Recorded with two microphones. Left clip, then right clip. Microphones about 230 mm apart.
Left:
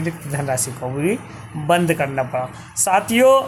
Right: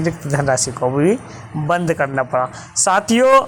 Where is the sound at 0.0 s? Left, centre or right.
Centre.